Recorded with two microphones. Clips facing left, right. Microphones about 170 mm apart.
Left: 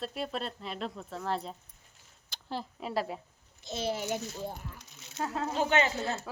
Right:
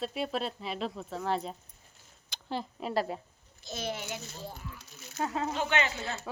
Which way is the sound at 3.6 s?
25° left (ahead or behind).